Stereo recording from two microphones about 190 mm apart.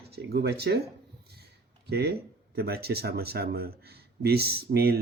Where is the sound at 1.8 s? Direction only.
60° right (ahead or behind).